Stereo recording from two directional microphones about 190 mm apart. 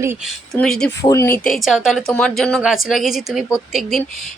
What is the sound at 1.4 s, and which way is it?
Speech, centre (ahead or behind).